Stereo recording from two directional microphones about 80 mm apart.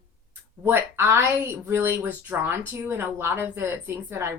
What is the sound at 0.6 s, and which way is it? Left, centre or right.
Speech, right.